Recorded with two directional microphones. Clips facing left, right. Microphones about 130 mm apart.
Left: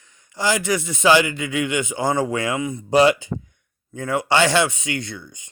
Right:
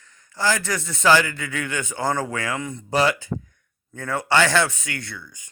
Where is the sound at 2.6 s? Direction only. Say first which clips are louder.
Left 5 dB; 10° left (ahead or behind).